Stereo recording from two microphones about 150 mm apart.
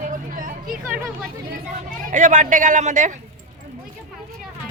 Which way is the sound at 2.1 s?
55° right (ahead or behind).